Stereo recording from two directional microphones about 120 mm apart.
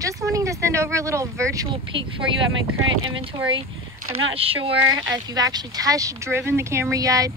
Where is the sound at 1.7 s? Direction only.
45° right (ahead or behind).